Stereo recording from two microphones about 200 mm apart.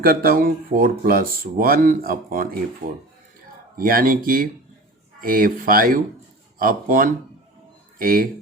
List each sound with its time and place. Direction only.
0.0 s speech: 45° right (ahead or behind)